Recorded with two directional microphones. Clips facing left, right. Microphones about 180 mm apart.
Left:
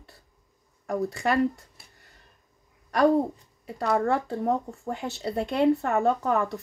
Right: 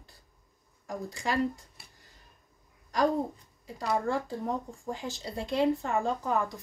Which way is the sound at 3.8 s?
65° left (ahead or behind).